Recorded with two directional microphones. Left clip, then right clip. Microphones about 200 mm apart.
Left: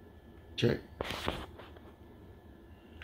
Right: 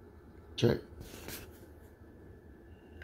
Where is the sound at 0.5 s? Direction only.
10° right (ahead or behind).